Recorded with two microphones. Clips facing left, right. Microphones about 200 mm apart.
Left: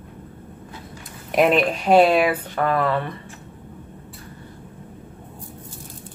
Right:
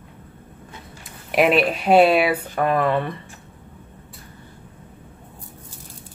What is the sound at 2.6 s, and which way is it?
Speech, 20° right (ahead or behind).